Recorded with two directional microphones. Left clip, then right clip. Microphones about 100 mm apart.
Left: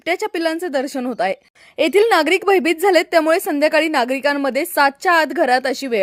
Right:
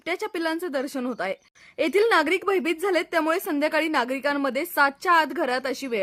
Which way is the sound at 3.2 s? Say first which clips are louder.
Left 8 dB; 40° left (ahead or behind).